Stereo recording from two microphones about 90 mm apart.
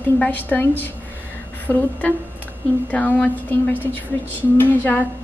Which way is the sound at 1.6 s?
20° left (ahead or behind).